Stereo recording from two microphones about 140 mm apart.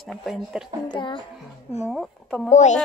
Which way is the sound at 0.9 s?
35° left (ahead or behind).